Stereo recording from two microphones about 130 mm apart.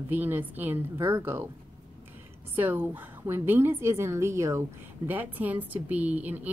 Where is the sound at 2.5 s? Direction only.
15° right (ahead or behind).